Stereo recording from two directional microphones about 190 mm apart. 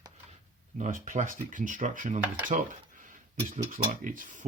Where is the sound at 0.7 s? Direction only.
40° right (ahead or behind).